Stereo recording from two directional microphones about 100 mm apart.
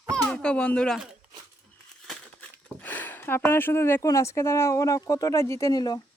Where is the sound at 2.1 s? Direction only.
10° left (ahead or behind).